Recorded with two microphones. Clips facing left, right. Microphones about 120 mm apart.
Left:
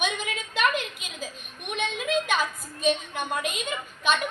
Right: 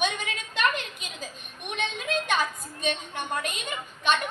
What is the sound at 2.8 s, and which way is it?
Speech, 5° left (ahead or behind).